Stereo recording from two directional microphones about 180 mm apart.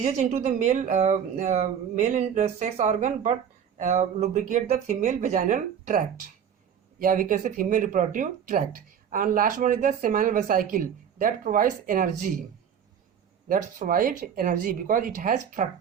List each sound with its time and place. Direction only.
0.2 s speech: 45° right (ahead or behind)
7.0 s speech: 50° right (ahead or behind)
13.5 s speech: 50° right (ahead or behind)